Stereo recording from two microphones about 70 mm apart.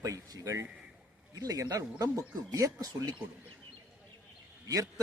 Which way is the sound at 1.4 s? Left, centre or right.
Right.